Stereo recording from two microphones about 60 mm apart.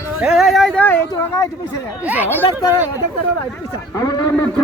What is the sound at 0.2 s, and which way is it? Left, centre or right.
Speech, centre.